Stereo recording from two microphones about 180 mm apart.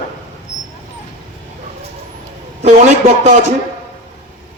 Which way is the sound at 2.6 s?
40° right (ahead or behind).